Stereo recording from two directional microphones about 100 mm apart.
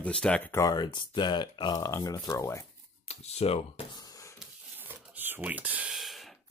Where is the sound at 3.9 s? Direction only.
35° left (ahead or behind).